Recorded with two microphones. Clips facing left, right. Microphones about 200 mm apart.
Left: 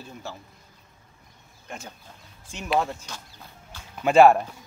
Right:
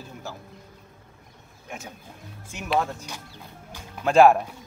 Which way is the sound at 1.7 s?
5° right (ahead or behind).